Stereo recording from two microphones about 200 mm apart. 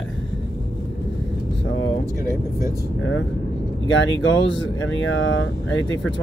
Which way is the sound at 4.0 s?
70° left (ahead or behind).